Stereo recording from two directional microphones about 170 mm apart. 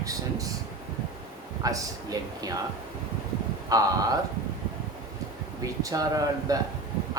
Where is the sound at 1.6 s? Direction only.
20° right (ahead or behind).